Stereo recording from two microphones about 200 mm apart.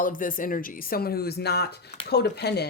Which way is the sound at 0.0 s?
45° left (ahead or behind).